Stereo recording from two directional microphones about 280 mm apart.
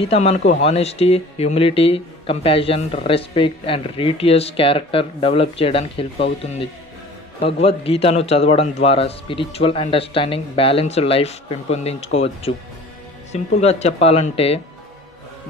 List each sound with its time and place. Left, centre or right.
0.0 s speech: left